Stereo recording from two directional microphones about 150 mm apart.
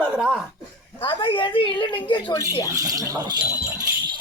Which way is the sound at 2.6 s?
20° right (ahead or behind).